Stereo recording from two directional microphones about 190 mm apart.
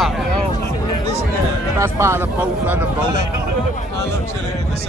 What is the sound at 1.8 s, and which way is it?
Speech, 15° right (ahead or behind).